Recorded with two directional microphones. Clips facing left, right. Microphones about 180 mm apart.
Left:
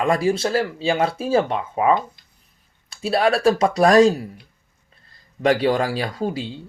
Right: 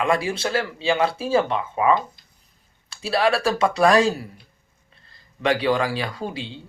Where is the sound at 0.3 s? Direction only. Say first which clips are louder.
Left 5 dB; 35° left (ahead or behind).